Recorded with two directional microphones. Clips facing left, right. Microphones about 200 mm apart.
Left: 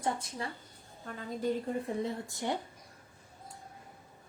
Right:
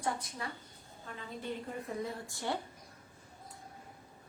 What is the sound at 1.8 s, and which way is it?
Speech, 20° left (ahead or behind).